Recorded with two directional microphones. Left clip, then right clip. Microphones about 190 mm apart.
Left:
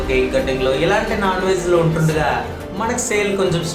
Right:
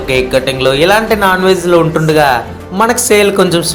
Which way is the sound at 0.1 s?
55° right (ahead or behind).